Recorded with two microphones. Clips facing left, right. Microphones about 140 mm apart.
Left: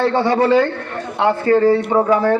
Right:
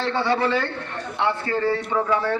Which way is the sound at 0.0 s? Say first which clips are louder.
Left 7 dB; 45° left (ahead or behind).